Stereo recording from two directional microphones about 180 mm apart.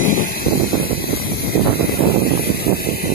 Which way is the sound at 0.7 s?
55° left (ahead or behind).